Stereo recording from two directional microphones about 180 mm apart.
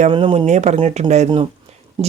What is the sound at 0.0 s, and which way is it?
A man's voice, 30° right (ahead or behind).